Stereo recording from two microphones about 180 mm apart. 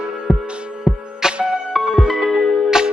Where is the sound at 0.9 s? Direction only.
10° left (ahead or behind).